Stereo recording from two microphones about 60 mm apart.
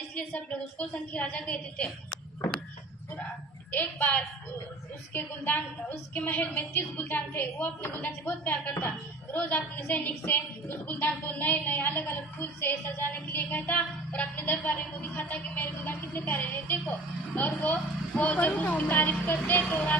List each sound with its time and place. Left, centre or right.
0.2 s a woman's voice: left
5.1 s a woman's voice: left
6.5 s a woman's voice: left
7.6 s a woman's voice: left